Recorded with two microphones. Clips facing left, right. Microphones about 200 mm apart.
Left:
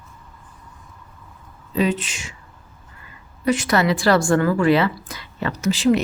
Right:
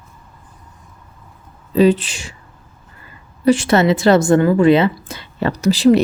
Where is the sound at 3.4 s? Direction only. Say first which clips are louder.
Right 6 dB; 30° right (ahead or behind).